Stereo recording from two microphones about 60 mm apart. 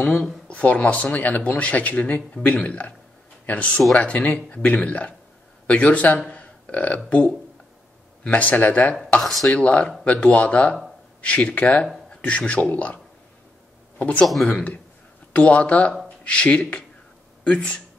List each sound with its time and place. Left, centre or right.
0.5 s speech: left
6.3 s a sound: left
8.3 s speech: left
9.2 s speech: centre
9.5 s a man's voice: left
14.2 s speech: centre
14.5 s speech: left